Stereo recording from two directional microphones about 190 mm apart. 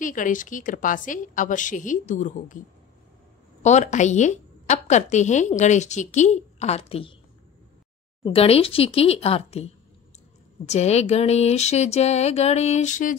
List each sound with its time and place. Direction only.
0.0 s a woman's voice: 45° left (ahead or behind)
3.6 s a woman's voice: 40° left (ahead or behind)
8.2 s a woman's voice: 30° left (ahead or behind)